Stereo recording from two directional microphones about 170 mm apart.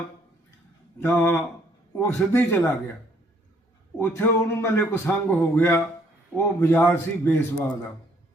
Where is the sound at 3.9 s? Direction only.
15° left (ahead or behind).